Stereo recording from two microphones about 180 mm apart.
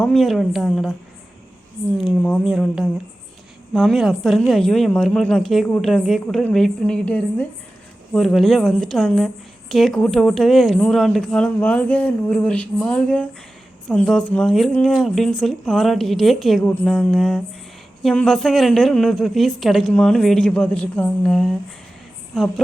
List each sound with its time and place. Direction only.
0.0 s a woman's voice: centre (ahead or behind)
2.0 s a woman's voice: centre (ahead or behind)